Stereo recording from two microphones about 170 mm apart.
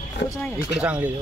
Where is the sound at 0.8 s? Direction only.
5° right (ahead or behind).